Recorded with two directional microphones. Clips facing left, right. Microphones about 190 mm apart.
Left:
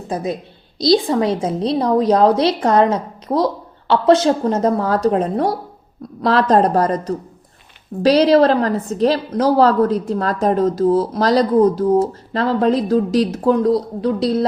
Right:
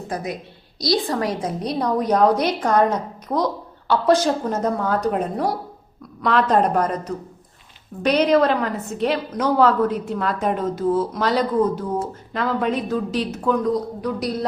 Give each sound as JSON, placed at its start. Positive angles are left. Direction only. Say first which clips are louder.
{"t": 0.1, "sound": "a woman's voice", "louder": "left 6 dB", "side_deg": 25}